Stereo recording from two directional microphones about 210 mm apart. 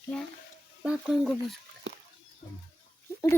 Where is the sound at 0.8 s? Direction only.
Centre (ahead or behind).